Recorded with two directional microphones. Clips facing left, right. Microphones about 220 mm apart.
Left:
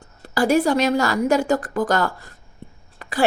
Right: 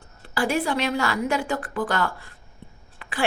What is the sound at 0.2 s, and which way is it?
A woman's voice, 40° left (ahead or behind).